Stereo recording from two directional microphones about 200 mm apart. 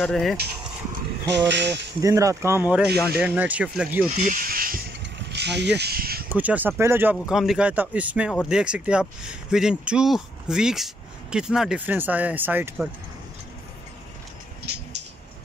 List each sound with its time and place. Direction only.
0.0 s speech: centre (ahead or behind)
1.3 s speech: 60° right (ahead or behind)
2.0 s speech: 15° right (ahead or behind)
4.2 s speech: 40° right (ahead or behind)
5.0 s mechanisms: 55° right (ahead or behind)
5.8 s speech: 50° right (ahead or behind)
6.2 s speech: 10° right (ahead or behind)